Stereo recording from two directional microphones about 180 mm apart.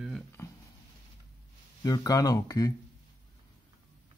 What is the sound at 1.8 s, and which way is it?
Speech, 20° left (ahead or behind).